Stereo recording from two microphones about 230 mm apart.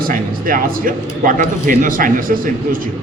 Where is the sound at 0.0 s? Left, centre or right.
Right.